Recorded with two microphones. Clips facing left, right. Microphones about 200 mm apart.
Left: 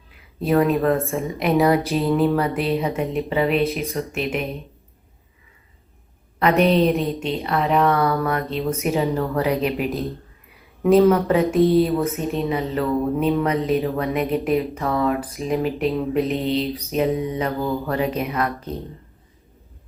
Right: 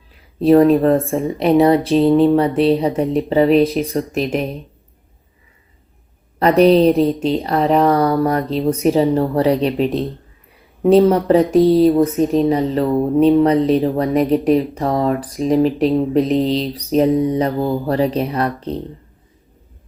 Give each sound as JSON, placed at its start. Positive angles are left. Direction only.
{"t": 0.3, "sound": "speech", "side_deg": -35}
{"t": 6.4, "sound": "speech", "side_deg": -35}